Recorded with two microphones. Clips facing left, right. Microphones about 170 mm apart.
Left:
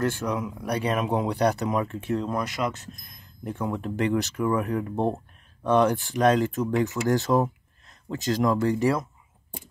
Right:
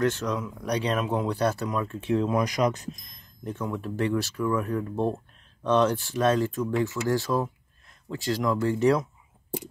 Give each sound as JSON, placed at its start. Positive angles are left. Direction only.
{"t": 0.0, "sound": "speech", "side_deg": 10}
{"t": 2.1, "sound": "speech", "side_deg": -10}
{"t": 3.1, "sound": "speech", "side_deg": 10}